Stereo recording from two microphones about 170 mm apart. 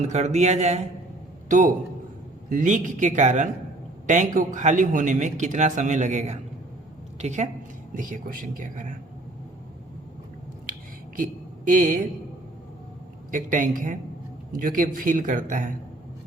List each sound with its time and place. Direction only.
0.1 s a man's voice: 40° right (ahead or behind)
11.2 s a woman's voice: 50° right (ahead or behind)
13.3 s a man's voice: 50° right (ahead or behind)